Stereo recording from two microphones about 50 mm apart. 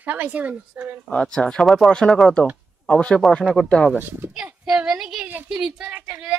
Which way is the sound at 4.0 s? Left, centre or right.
Right.